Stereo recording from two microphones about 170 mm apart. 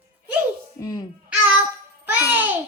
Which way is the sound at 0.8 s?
25° left (ahead or behind).